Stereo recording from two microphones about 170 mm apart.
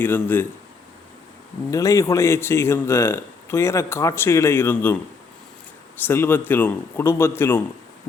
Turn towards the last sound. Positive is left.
turn(degrees=15)  # may be behind; listen again after turning